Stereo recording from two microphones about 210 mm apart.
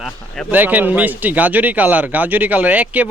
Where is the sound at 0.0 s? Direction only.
5° right (ahead or behind).